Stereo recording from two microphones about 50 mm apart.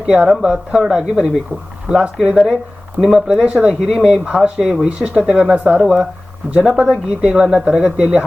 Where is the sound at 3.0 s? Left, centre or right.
Centre.